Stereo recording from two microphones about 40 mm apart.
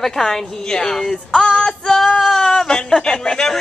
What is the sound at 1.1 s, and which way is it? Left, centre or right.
Female singing, left.